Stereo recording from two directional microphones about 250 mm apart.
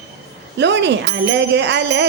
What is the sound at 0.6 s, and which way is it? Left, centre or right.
Music, right.